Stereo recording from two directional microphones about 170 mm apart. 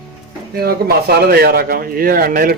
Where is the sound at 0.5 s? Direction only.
65° right (ahead or behind).